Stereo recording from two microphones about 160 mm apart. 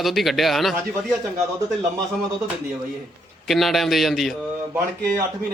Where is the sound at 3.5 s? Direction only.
Centre (ahead or behind).